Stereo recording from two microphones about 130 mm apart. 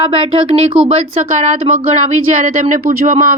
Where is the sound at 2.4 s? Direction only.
80° right.